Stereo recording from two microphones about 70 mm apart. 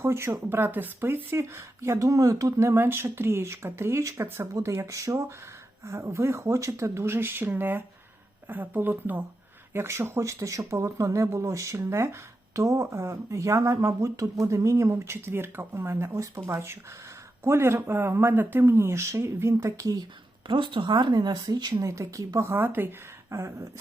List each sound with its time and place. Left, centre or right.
0.0 s speech: right
9.7 s speech: right
12.5 s speech: right
20.9 s speech: right
21.8 s speech: right
22.4 s speech: right
23.3 s speech: right